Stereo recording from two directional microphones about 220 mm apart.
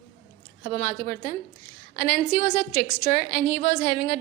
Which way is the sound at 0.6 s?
40° left (ahead or behind).